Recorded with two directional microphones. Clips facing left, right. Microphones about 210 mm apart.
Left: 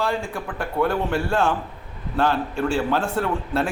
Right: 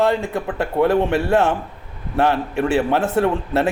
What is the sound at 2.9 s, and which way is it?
Speech, 20° right (ahead or behind).